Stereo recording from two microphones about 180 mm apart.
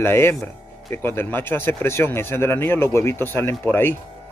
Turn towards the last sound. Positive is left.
turn(degrees=10)  # may be behind; listen again after turning